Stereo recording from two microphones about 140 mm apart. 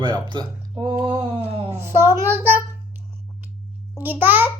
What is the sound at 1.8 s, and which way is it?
Speech, 20° right (ahead or behind).